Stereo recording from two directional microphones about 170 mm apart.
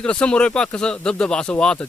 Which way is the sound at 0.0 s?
5° left (ahead or behind).